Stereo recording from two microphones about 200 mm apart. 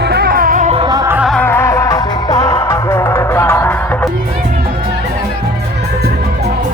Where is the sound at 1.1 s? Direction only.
5° right (ahead or behind).